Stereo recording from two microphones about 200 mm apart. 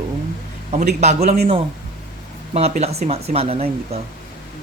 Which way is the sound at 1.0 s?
35° right (ahead or behind).